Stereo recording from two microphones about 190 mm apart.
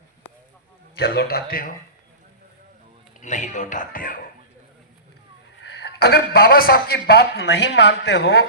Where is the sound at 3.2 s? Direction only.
40° left (ahead or behind).